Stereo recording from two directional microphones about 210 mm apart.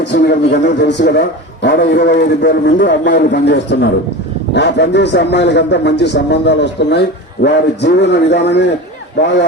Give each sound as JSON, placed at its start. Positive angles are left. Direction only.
{"t": 0.0, "sound": "a man's voice", "side_deg": 55}